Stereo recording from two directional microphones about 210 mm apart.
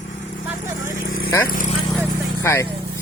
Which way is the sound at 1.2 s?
10° left (ahead or behind).